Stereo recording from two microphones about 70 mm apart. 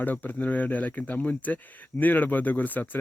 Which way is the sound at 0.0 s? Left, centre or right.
Left.